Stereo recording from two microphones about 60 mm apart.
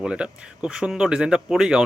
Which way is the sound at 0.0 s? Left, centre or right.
Centre.